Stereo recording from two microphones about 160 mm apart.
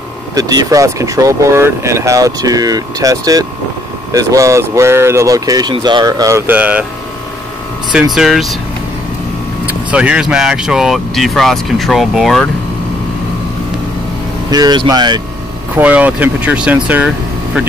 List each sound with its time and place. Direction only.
0.3 s speech: 25° right (ahead or behind)
7.9 s speech: 5° right (ahead or behind)
9.7 s speech: 10° right (ahead or behind)
14.5 s speech: 25° right (ahead or behind)
15.7 s speech: 10° right (ahead or behind)